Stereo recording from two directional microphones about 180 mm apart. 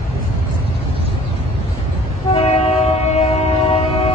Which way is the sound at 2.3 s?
35° left (ahead or behind).